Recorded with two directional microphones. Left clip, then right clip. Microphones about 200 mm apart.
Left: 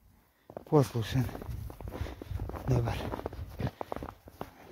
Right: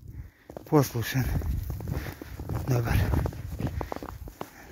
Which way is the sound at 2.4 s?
50° right (ahead or behind).